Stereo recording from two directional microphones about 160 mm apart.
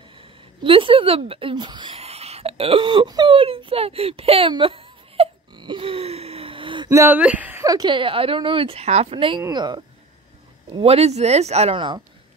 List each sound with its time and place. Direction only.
0.2 s speech: 35° right (ahead or behind)
2.0 s whimper: 40° right (ahead or behind)
6.9 s speech: 15° right (ahead or behind)
7.6 s speech: 25° right (ahead or behind)
10.8 s speech: 40° right (ahead or behind)